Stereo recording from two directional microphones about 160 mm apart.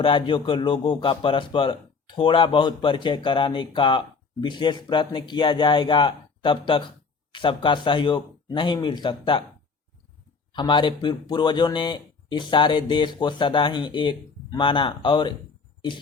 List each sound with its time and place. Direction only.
0.0 s speech: 30° left (ahead or behind)
10.5 s speech: 30° left (ahead or behind)